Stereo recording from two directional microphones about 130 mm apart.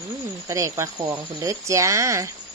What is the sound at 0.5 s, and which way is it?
Speech, 20° right (ahead or behind).